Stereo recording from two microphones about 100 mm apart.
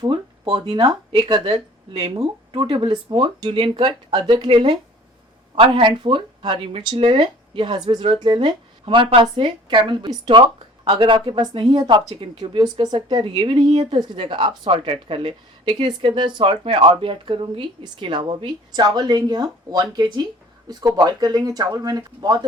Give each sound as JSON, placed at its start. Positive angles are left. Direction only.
{"t": 0.0, "sound": "speech", "side_deg": -50}
{"t": 13.1, "sound": "a woman's voice", "side_deg": -75}
{"t": 13.4, "sound": "speech", "side_deg": -50}
{"t": 13.7, "sound": "speech", "side_deg": -85}
{"t": 14.3, "sound": "speech", "side_deg": -50}
{"t": 14.7, "sound": "speech", "side_deg": -60}